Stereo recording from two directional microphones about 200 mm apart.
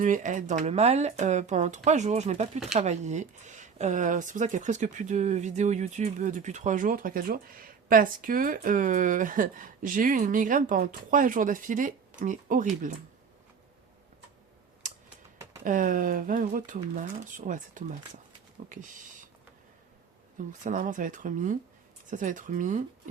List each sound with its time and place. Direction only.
0.0 s speech: 40° right (ahead or behind)
14.8 s typing: 40° right (ahead or behind)
15.6 s speech: 40° right (ahead or behind)
20.5 s speech: 40° right (ahead or behind)